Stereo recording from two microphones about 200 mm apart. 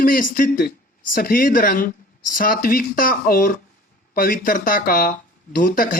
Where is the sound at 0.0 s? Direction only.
45° left (ahead or behind).